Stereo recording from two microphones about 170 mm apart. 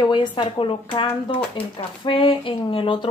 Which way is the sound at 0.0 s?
30° left (ahead or behind).